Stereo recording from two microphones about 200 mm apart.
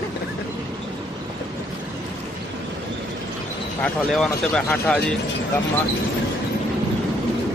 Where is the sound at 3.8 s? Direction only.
5° left (ahead or behind).